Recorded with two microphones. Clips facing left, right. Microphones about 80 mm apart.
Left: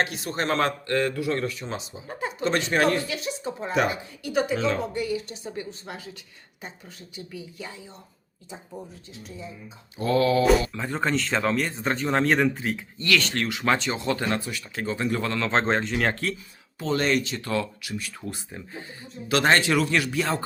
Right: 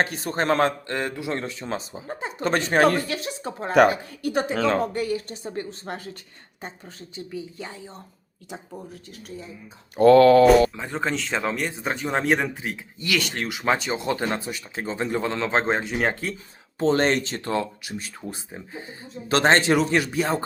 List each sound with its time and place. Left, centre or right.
0.0 s a man's voice: right
0.6 s speech: right
1.6 s a man's voice: right
4.5 s a man's voice: right
10.0 s mantra: right
10.8 s speech: centre
13.0 s speech: centre
16.7 s speech: right